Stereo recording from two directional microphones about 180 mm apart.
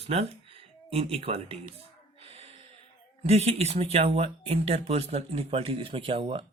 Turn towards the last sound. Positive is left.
turn(degrees=-30)  # may be behind; listen again after turning